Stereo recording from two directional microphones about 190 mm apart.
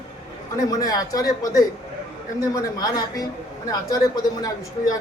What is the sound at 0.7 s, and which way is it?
Speech, 20° left (ahead or behind).